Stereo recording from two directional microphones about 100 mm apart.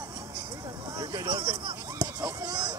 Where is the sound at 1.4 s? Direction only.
60° right (ahead or behind).